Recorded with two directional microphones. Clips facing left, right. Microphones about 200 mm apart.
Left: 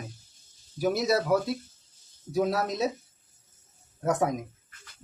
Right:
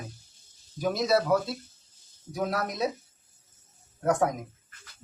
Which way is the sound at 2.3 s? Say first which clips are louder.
Left 4 dB; 25° left (ahead or behind).